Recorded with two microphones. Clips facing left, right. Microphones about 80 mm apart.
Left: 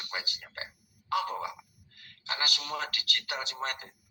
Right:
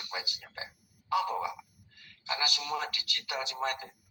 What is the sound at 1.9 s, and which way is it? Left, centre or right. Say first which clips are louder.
A man's voice: right 1 dB; left.